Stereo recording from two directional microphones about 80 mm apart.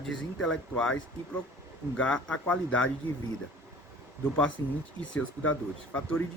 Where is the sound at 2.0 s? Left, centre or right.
Centre.